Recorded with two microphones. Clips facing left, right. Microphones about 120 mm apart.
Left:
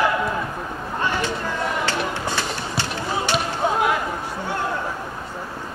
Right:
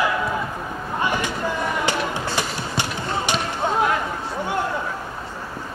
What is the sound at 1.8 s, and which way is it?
Basketball bounce, 15° right (ahead or behind).